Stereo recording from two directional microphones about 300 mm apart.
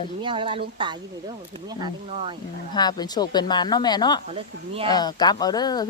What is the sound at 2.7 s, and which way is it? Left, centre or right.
Speech, centre.